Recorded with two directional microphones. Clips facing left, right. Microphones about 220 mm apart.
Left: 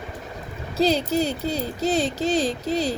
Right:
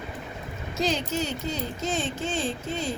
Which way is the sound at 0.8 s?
35° left (ahead or behind).